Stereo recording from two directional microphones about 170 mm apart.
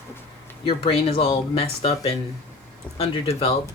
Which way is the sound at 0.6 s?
35° left (ahead or behind).